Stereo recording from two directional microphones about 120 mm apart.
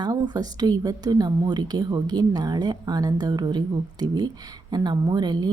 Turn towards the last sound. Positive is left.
turn(degrees=-35)  # may be behind; listen again after turning